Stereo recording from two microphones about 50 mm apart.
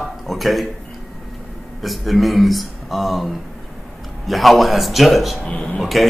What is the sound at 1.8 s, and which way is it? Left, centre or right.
Speech, centre.